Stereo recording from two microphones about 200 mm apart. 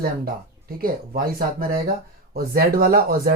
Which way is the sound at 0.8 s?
50° right (ahead or behind).